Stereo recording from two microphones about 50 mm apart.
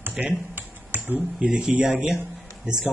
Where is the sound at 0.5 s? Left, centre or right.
Right.